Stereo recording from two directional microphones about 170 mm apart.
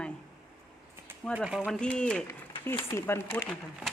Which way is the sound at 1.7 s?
5° left (ahead or behind).